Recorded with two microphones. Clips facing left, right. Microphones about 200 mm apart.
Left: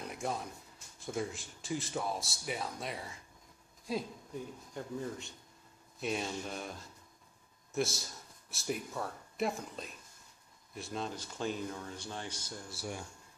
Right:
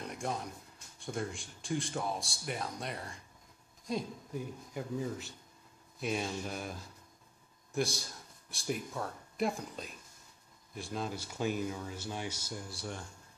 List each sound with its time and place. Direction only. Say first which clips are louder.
0.0 s a sound: even; 5° left (ahead or behind)
0.9 s speech: left 1 dB; centre (ahead or behind)
4.3 s speech: right 2 dB; 5° right (ahead or behind)
12.7 s speech: left 5 dB; 10° left (ahead or behind)